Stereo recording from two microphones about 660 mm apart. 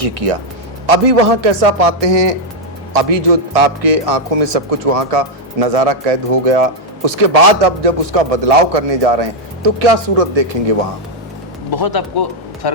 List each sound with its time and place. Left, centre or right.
0.0 s a man's voice: right
11.7 s speech: left